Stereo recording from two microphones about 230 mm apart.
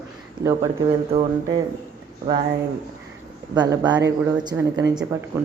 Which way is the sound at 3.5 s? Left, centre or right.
Centre.